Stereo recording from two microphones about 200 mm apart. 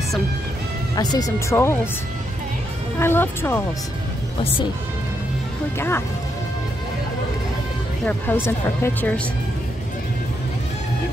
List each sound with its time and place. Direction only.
0.9 s speech: 20° left (ahead or behind)
3.0 s speech: 10° left (ahead or behind)
5.8 s speech: 10° left (ahead or behind)
8.0 s speech: 5° left (ahead or behind)